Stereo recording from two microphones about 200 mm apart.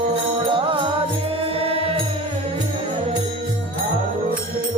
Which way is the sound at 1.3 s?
30° right (ahead or behind).